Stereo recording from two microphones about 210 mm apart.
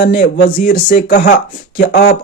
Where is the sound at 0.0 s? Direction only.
45° left (ahead or behind).